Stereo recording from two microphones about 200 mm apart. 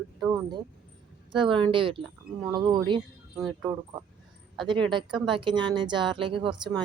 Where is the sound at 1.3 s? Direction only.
25° right (ahead or behind).